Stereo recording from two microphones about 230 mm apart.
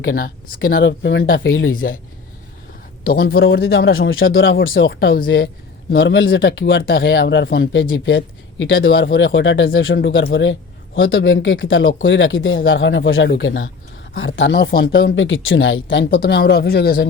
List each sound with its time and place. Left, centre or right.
0.1 s speech: left
0.7 s speech: left
1.7 s speech: left
3.1 s speech: left